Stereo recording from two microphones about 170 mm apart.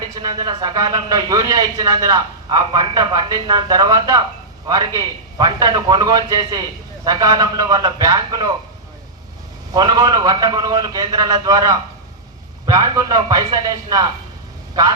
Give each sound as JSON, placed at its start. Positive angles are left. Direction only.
{"t": 0.2, "sound": "speech", "side_deg": -25}
{"t": 9.7, "sound": "speech", "side_deg": -25}